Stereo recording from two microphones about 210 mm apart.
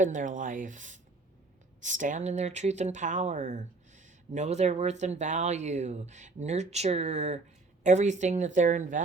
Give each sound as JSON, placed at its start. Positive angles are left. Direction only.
{"t": 0.0, "sound": "speech", "side_deg": -35}